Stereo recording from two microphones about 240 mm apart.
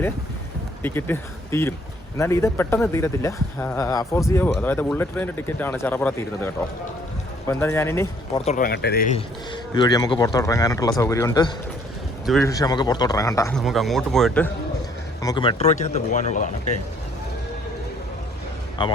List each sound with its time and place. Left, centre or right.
0.8 s speech: centre
8.4 s speech: left
9.1 s speech: centre
12.2 s speech: centre
12.5 s speech: centre
13.6 s speech: centre
15.2 s speech: centre
18.8 s speech: centre